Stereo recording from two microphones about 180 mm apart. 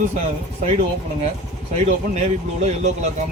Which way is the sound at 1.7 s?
35° right (ahead or behind).